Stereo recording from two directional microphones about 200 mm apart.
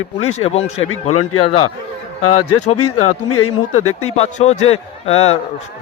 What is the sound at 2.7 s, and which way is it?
Speech, 90° left.